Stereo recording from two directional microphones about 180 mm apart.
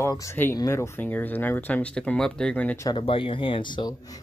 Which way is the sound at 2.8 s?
30° left (ahead or behind).